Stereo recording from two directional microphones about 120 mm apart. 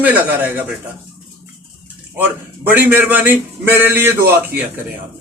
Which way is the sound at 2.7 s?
15° right (ahead or behind).